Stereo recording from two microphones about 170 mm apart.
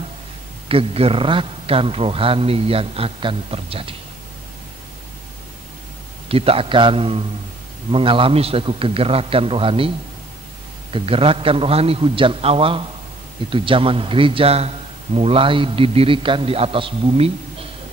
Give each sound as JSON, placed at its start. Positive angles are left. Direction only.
{"t": 0.7, "sound": "a man's voice", "side_deg": -35}
{"t": 6.2, "sound": "a man's voice", "side_deg": -35}